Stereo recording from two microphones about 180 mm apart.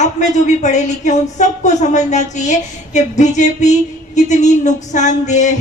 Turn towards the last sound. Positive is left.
turn(degrees=40)  # may be behind; listen again after turning